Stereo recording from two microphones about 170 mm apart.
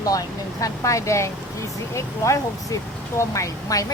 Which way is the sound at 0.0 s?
20° left (ahead or behind).